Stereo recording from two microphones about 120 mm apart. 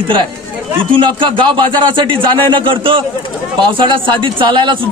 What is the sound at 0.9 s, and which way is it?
A man's voice, 45° right (ahead or behind).